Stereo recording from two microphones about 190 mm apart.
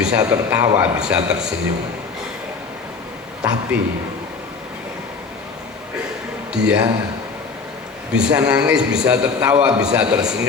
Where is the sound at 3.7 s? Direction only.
5° right (ahead or behind).